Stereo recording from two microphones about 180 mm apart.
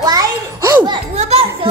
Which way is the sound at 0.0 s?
20° right (ahead or behind).